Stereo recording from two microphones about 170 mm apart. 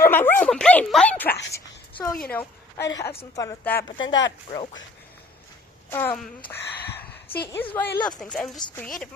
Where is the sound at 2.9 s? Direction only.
20° left (ahead or behind).